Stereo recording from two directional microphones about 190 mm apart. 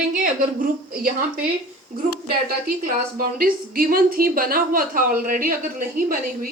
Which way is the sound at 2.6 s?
50° right (ahead or behind).